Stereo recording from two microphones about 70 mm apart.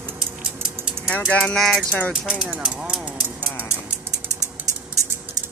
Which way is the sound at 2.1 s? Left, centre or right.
Centre.